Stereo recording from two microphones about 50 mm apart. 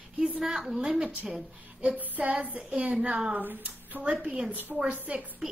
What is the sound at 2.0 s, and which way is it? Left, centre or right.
Child singing, right.